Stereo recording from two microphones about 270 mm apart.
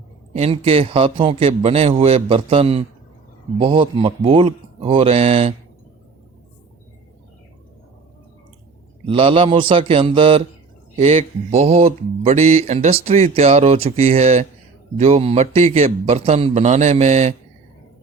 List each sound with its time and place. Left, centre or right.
0.3 s a man's voice: right
9.0 s a man's voice: centre